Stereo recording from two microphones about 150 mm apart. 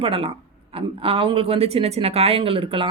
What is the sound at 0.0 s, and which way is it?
Speech, 35° right (ahead or behind).